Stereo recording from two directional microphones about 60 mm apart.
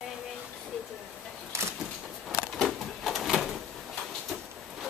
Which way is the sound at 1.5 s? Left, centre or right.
Right.